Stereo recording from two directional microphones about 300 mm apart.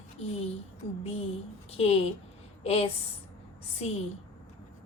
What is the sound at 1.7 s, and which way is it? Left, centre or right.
A woman's voice, centre.